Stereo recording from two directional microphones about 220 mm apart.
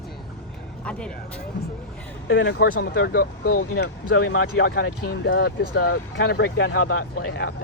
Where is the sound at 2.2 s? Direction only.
55° left (ahead or behind).